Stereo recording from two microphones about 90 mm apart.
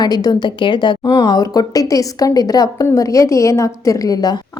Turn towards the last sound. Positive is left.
turn(degrees=45)  # may be behind; listen again after turning